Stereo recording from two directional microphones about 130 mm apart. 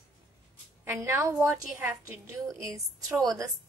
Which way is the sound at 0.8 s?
20° right (ahead or behind).